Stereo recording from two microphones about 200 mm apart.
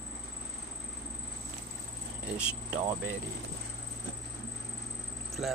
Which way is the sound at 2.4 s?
5° right (ahead or behind).